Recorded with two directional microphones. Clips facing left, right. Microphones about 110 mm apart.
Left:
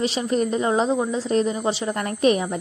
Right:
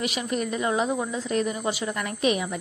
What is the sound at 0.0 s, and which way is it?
Speech, 30° left (ahead or behind).